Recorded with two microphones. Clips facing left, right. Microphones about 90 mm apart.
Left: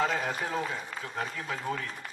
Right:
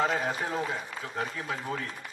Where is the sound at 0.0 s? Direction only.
35° right (ahead or behind).